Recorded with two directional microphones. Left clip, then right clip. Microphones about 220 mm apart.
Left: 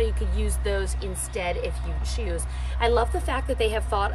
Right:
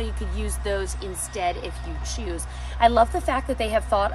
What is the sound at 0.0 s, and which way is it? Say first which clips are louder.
Speech: left 4 dB; 15° right (ahead or behind).